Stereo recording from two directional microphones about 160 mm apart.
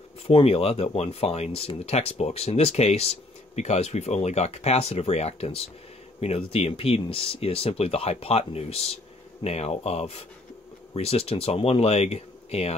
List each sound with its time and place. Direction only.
0.3 s speech: 35° left (ahead or behind)